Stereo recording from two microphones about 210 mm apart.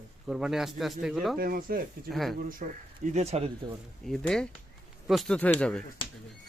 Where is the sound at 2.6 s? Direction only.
35° right (ahead or behind).